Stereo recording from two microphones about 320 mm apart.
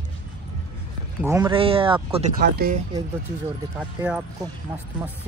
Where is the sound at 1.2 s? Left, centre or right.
Centre; by 2.8 s right.